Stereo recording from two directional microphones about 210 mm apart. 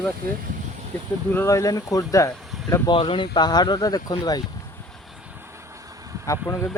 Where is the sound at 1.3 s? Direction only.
10° left (ahead or behind).